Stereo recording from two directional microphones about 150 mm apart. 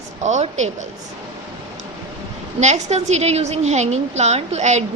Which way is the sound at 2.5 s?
50° right (ahead or behind).